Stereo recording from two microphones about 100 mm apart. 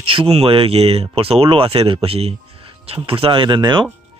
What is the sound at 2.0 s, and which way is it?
Speech, 90° right.